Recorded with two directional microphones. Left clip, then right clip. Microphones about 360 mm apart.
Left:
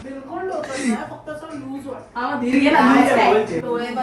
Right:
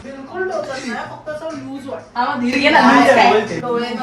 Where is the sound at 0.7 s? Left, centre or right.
Left.